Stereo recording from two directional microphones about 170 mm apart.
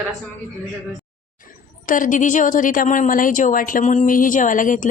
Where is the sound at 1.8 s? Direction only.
50° left (ahead or behind).